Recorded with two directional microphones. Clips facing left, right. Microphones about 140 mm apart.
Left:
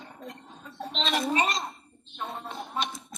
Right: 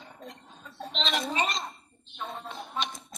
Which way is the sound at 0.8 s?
40° left (ahead or behind).